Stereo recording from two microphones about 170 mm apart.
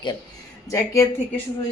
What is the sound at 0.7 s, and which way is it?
Speech, 20° left (ahead or behind).